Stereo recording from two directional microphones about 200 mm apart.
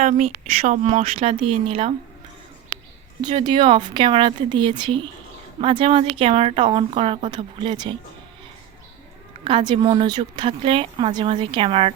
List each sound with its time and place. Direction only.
0.0 s speech: 35° right (ahead or behind)
3.2 s speech: 20° right (ahead or behind)
9.4 s speech: 25° right (ahead or behind)